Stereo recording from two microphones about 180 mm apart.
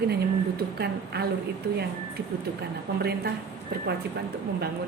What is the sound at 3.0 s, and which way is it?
Speech, 60° right (ahead or behind).